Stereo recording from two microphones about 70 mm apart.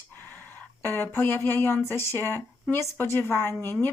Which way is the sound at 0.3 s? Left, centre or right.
Left.